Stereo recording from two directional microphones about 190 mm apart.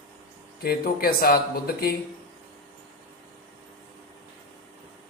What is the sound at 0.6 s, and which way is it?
Speech, 50° left (ahead or behind).